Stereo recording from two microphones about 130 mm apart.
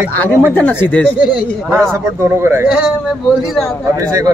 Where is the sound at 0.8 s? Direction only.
10° left (ahead or behind).